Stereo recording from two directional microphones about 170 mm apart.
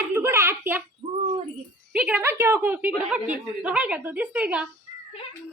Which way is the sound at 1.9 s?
5° right (ahead or behind).